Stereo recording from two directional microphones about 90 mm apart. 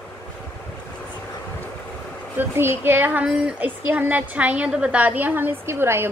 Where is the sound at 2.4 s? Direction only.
25° right (ahead or behind).